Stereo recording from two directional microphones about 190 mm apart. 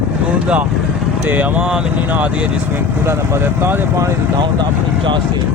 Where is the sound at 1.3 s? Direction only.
10° right (ahead or behind); by 5.2 s 25° right (ahead or behind).